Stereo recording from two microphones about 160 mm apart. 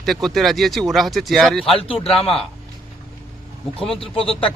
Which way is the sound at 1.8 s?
35° left (ahead or behind).